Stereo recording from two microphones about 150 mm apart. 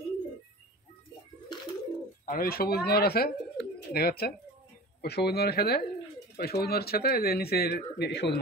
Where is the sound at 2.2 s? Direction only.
80° left.